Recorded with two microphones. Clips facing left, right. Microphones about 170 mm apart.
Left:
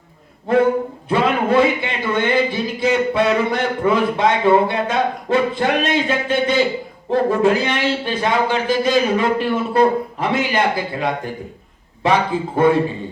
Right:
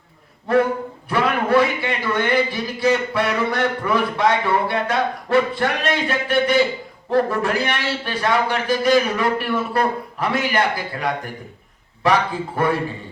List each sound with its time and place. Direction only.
1.0 s a man's voice: 20° left (ahead or behind)